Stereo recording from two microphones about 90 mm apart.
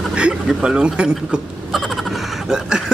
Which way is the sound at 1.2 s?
Centre (ahead or behind).